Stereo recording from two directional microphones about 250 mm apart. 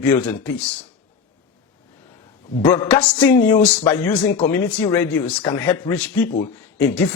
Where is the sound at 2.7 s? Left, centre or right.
Centre.